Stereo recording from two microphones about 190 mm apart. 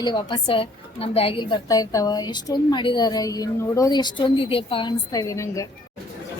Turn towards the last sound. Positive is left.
turn(degrees=15)  # may be behind; listen again after turning